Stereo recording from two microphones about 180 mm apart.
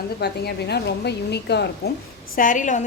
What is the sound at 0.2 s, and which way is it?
A woman's voice, 65° left (ahead or behind).